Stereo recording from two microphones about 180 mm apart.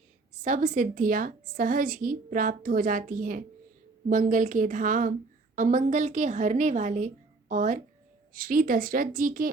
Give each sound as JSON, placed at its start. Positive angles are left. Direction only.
{"t": 0.4, "sound": "a woman's voice", "side_deg": -45}